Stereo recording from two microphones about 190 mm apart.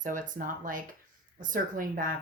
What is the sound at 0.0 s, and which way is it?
A woman's voice, 45° right (ahead or behind).